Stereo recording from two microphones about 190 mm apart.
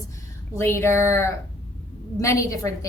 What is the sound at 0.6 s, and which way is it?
Speech, 15° left (ahead or behind).